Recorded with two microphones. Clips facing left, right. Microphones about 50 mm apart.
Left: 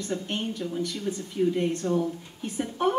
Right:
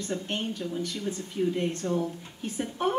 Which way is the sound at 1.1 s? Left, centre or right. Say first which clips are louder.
Left 3 dB; centre.